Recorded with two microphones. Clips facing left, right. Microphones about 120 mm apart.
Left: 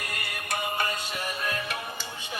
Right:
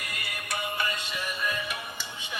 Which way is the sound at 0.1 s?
45° left (ahead or behind).